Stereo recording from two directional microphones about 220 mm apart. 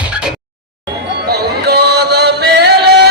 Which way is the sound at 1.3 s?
45° right (ahead or behind).